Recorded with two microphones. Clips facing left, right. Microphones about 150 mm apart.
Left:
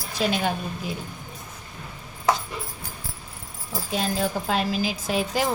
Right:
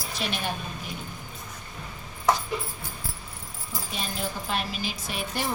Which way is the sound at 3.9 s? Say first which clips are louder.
Left 8 dB; 90° left.